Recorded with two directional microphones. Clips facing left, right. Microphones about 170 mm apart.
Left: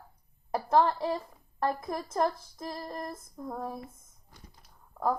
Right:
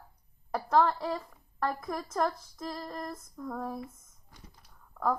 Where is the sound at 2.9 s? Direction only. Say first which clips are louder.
Left 1 dB; 25° left (ahead or behind).